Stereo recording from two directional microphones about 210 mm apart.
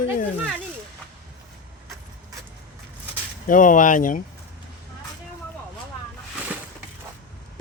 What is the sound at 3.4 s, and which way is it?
Speech, 40° left (ahead or behind).